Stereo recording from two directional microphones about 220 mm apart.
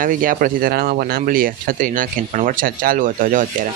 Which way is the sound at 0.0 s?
40° right (ahead or behind).